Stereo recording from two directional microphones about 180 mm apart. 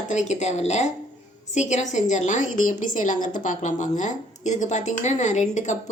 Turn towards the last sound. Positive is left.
turn(degrees=45)  # may be behind; listen again after turning